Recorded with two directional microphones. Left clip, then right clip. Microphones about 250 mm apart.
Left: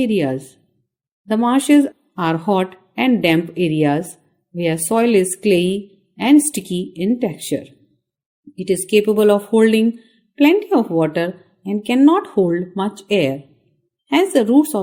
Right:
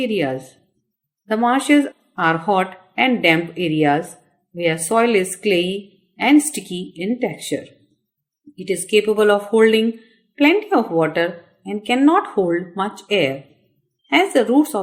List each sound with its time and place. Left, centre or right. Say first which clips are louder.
0.0 s speech: left 2 dB; left